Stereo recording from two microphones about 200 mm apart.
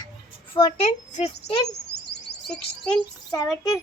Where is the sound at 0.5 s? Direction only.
30° left (ahead or behind).